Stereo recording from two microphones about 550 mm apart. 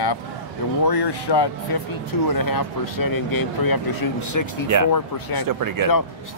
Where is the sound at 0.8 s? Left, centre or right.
Left.